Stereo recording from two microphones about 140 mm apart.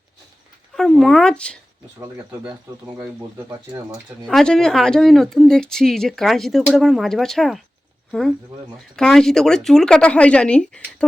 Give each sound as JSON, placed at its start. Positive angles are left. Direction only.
{"t": 0.8, "sound": "speech", "side_deg": 0}
{"t": 3.0, "sound": "speech", "side_deg": -20}
{"t": 4.3, "sound": "speech", "side_deg": 5}
{"t": 9.0, "sound": "speech", "side_deg": 5}